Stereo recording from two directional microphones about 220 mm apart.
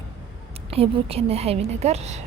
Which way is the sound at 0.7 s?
25° right (ahead or behind).